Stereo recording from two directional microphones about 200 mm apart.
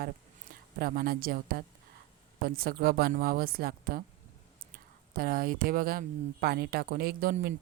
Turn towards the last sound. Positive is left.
turn(degrees=-45)  # may be behind; listen again after turning